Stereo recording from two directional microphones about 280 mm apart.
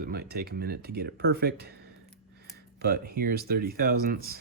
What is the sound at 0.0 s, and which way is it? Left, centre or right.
Speech, right.